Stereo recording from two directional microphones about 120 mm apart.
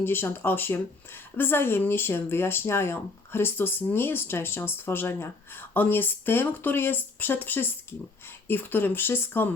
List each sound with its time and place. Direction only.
0.0 s speech: 20° left (ahead or behind)